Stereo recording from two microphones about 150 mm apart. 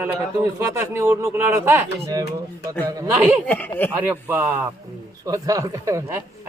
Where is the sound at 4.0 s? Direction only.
15° right (ahead or behind).